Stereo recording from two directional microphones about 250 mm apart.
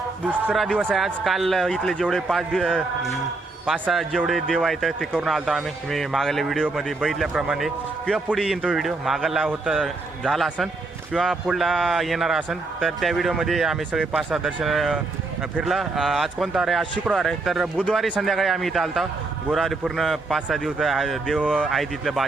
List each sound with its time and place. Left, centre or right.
0.3 s speech: centre